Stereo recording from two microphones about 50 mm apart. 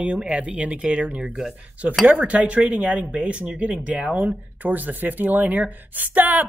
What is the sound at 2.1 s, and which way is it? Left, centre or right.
Speech, right.